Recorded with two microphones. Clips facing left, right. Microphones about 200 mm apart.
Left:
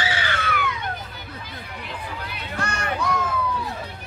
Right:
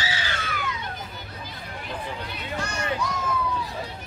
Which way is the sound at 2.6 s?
60° left (ahead or behind).